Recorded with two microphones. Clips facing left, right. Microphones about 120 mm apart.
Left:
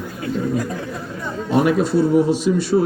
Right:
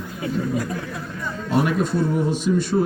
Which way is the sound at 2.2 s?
45° right (ahead or behind).